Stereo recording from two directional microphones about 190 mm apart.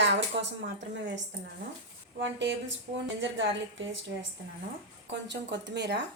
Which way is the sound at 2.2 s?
70° right (ahead or behind).